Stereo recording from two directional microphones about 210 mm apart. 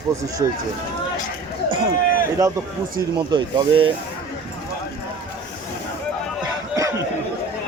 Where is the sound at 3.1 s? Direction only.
20° right (ahead or behind).